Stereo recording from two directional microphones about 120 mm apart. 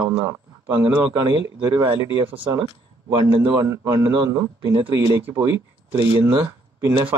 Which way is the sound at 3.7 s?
25° right (ahead or behind).